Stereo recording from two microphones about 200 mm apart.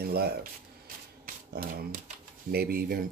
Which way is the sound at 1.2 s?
50° right (ahead or behind).